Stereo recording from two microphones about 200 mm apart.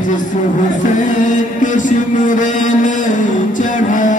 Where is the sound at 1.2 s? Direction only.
40° left (ahead or behind).